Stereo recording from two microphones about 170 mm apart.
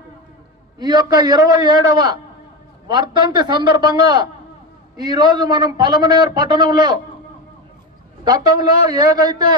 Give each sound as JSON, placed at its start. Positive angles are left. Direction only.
{"t": 0.7, "sound": "a man's voice", "side_deg": -25}
{"t": 8.2, "sound": "a man's voice", "side_deg": -25}